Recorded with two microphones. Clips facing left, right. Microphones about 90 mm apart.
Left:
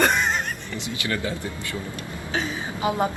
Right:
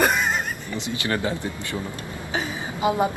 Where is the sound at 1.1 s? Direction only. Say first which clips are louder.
Right 3 dB; 25° right (ahead or behind).